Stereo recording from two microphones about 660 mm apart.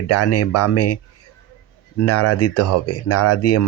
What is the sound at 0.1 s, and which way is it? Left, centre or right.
Speech, left.